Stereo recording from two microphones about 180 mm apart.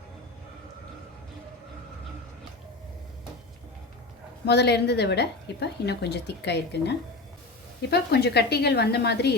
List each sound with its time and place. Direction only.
4.4 s a woman's voice: 70° left (ahead or behind)